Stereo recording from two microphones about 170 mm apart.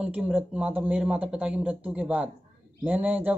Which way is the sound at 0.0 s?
5° right (ahead or behind).